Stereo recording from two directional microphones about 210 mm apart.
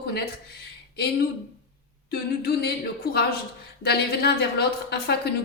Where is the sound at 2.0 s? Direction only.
50° left (ahead or behind).